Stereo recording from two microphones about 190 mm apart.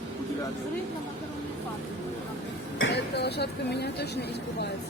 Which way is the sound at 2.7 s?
70° left (ahead or behind).